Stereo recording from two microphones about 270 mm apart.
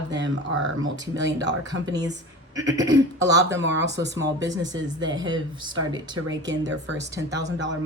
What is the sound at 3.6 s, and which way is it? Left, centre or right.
Speech, right.